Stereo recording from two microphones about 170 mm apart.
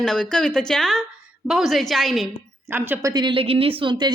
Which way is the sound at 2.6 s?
10° right (ahead or behind).